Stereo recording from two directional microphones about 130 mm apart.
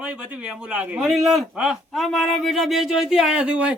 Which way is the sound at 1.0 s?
Centre (ahead or behind).